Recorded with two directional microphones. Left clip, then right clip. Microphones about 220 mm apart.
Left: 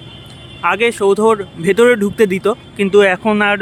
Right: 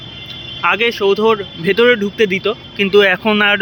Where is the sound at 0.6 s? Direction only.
15° left (ahead or behind).